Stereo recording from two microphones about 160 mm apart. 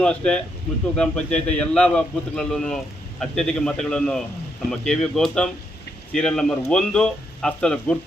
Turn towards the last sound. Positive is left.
turn(degrees=5)  # may be behind; listen again after turning